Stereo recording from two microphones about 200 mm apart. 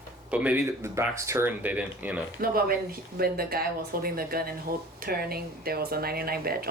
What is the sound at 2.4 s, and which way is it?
Speech, 50° right (ahead or behind).